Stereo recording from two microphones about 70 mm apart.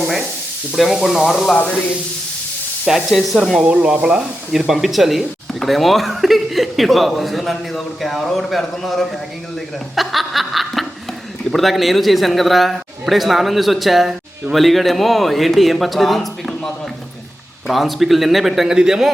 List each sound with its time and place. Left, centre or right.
0.8 s speech: centre
2.8 s speech: centre
3.6 s speech: centre
4.6 s speech: centre